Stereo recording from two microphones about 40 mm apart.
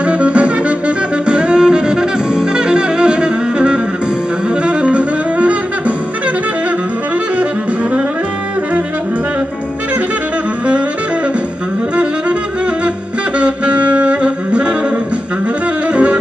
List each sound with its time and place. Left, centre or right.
0.0 s music: right
4.6 s saxophone: right
13.4 s saxophone: right
15.9 s music: right